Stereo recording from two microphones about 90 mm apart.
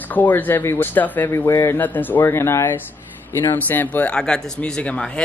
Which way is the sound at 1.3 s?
30° left (ahead or behind).